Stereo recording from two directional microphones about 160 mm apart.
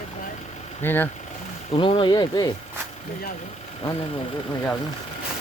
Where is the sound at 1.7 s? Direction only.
35° left (ahead or behind).